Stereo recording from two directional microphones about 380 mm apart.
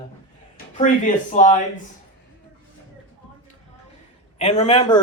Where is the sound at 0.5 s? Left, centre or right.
Centre.